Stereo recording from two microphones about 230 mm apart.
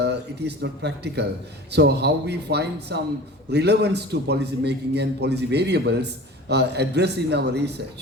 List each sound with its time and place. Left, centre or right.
0.0 s a man's voice: right